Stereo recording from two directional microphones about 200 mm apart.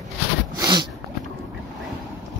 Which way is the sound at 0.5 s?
20° right (ahead or behind).